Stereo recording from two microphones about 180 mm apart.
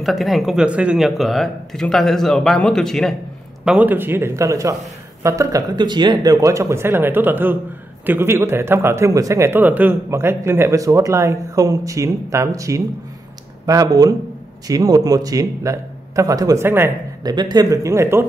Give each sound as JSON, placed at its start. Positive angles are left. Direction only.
{"t": 0.0, "sound": "speech", "side_deg": 0}
{"t": 3.6, "sound": "a man's voice", "side_deg": -10}